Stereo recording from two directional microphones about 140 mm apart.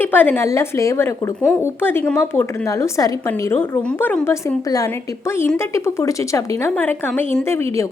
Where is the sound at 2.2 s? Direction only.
20° left (ahead or behind).